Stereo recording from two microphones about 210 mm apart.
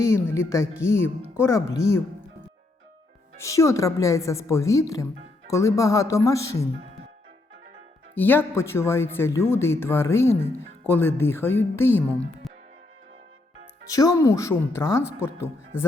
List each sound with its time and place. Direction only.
0.0 s speech: 15° left (ahead or behind)
3.3 s speech: 15° left (ahead or behind)
8.1 s speech: 10° left (ahead or behind)
13.9 s speech: 15° left (ahead or behind)